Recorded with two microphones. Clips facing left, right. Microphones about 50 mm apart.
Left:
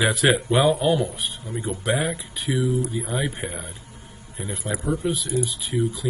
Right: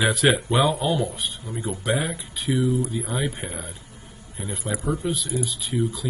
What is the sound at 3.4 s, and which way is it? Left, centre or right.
A man's voice, left.